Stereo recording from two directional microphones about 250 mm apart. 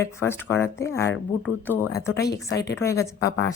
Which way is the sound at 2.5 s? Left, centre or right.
Left.